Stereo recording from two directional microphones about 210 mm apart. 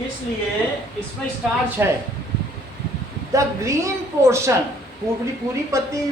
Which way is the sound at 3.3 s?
15° right (ahead or behind).